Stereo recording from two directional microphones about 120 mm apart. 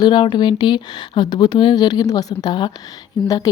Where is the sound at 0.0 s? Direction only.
40° left (ahead or behind).